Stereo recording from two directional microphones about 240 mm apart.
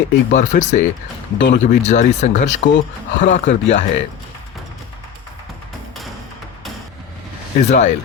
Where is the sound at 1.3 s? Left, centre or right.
Left.